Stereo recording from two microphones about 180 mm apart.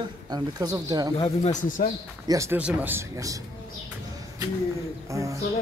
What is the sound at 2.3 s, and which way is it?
Speech, 15° right (ahead or behind).